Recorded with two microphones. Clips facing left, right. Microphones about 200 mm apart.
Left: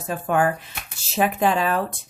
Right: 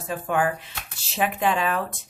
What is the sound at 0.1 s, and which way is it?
Speech, 45° left (ahead or behind).